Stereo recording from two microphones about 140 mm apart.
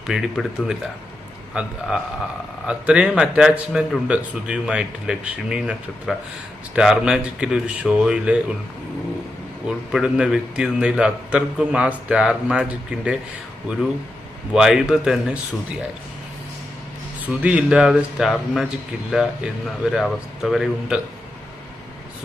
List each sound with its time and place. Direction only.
0.1 s speech: 5° right (ahead or behind)
2.6 s speech: 10° right (ahead or behind)
9.6 s speech: 5° right (ahead or behind)
14.5 s speech: 5° right (ahead or behind)
17.2 s speech: 10° right (ahead or behind)